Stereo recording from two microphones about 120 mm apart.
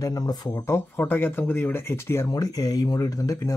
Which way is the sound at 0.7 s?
20° left (ahead or behind).